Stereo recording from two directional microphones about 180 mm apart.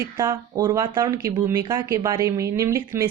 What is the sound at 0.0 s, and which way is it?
Speech, 15° right (ahead or behind).